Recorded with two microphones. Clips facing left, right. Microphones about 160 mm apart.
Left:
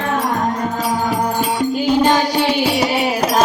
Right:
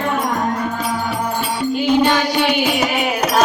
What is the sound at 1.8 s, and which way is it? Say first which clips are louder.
Music: even; 40° left (ahead or behind).